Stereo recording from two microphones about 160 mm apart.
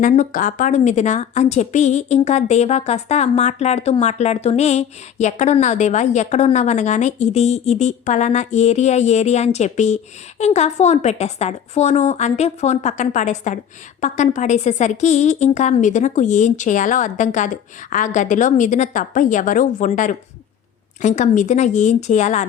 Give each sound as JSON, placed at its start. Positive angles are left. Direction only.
{"t": 0.0, "sound": "a woman's voice", "side_deg": 55}